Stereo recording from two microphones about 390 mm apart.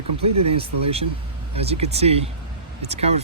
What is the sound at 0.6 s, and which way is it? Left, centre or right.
Speech, centre.